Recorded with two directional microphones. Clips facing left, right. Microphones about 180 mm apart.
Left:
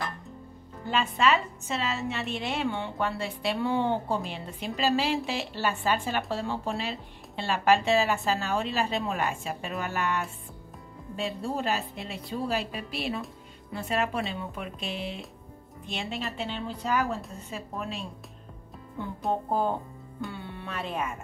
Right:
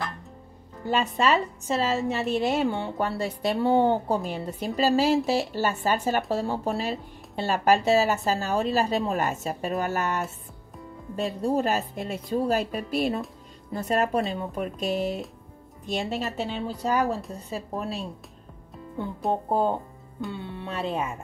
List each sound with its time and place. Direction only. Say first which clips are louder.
0.8 s a woman's voice: right 2 dB; 40° right (ahead or behind)
19.5 s speech: right 4 dB; 25° right (ahead or behind)
20.2 s speech: right 3 dB; centre (ahead or behind)
20.5 s speech: right 5 dB; 25° right (ahead or behind)